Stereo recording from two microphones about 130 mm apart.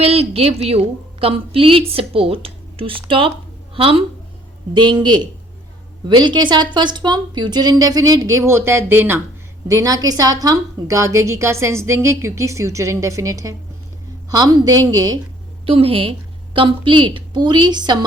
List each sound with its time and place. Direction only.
0.0 s a woman's voice: 50° right (ahead or behind); by 15.2 s 30° right (ahead or behind)
15.6 s a woman's voice: 45° right (ahead or behind)